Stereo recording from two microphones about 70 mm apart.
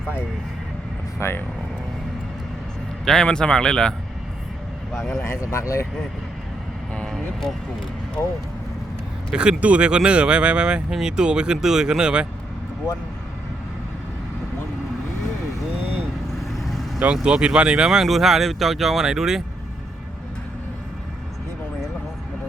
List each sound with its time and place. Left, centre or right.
1.2 s speech: left
3.1 s speech: centre
5.4 s speech: left
6.9 s vehicle: centre
9.3 s speech: centre
16.5 s vehicle: centre
17.0 s speech: centre